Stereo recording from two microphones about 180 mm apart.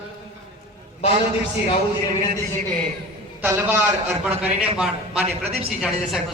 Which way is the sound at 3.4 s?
10° right (ahead or behind).